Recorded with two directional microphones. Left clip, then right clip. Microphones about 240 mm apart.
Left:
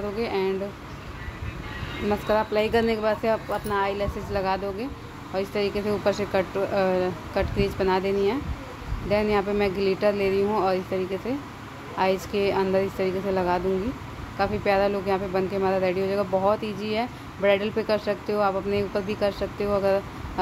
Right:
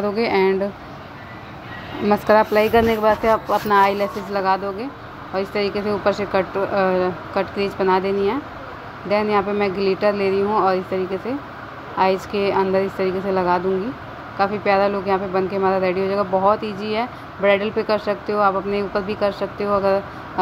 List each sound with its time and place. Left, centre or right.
0.1 s speech: centre
2.0 s speech: centre
3.6 s speech: centre
4.3 s speech: centre
12.0 s speech: centre